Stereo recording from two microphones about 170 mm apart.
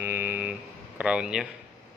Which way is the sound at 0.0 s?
10° right (ahead or behind).